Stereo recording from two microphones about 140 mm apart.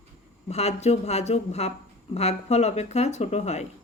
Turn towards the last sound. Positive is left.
turn(degrees=55)  # may be behind; listen again after turning